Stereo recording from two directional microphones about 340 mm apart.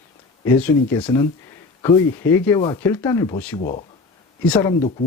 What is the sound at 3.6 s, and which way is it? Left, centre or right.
Speech, left.